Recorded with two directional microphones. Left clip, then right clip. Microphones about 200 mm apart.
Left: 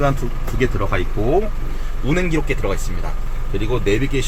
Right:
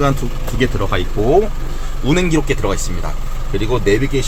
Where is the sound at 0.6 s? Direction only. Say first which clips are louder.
Right 2 dB; 15° right (ahead or behind).